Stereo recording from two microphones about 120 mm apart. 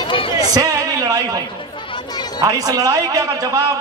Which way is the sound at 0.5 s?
30° right (ahead or behind).